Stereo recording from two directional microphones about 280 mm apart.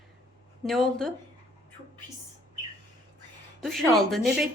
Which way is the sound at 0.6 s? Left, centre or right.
Centre.